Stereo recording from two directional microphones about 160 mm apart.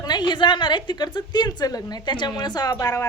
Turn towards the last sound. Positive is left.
turn(degrees=25)  # may be behind; listen again after turning